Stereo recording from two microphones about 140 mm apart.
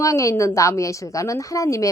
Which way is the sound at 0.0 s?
20° left (ahead or behind).